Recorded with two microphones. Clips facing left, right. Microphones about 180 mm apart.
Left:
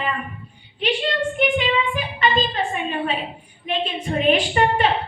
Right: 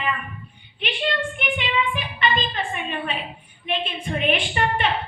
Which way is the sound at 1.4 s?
40° left (ahead or behind).